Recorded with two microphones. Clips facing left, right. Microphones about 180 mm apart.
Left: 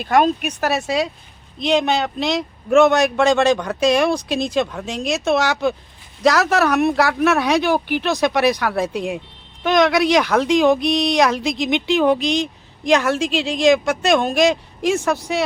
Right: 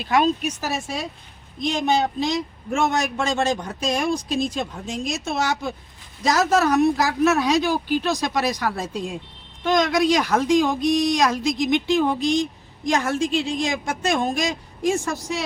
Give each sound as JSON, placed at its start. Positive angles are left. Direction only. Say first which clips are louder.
{"t": 0.0, "sound": "speech", "louder": "left 3 dB", "side_deg": 50}